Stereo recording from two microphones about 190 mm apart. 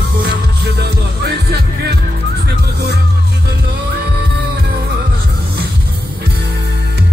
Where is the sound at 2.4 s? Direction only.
60° right (ahead or behind).